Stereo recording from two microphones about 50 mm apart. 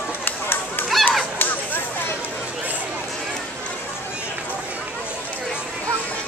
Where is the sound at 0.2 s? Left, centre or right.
Left.